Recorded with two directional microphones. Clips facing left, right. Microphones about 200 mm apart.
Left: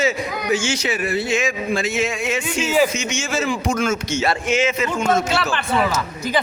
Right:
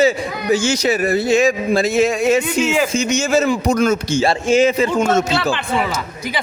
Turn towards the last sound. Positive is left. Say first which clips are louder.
# right 6 dB
turn(degrees=-35)  # may be behind; listen again after turning